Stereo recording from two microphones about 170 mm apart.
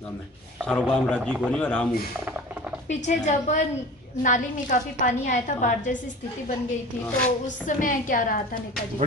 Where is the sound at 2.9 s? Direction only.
40° left (ahead or behind).